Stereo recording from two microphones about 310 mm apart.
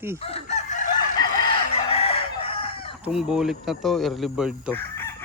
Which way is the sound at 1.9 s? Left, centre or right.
Centre.